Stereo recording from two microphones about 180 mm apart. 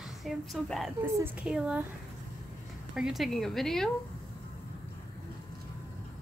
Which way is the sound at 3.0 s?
Centre (ahead or behind).